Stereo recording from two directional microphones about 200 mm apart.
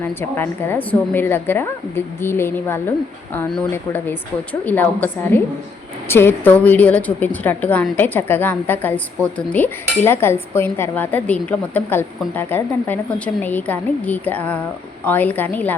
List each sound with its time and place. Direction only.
0.0 s a woman's voice: 10° left (ahead or behind)